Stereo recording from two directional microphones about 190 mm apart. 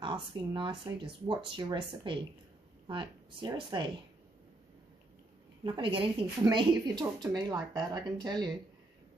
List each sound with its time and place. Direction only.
0.0 s speech: 25° right (ahead or behind)
5.6 s speech: 25° right (ahead or behind)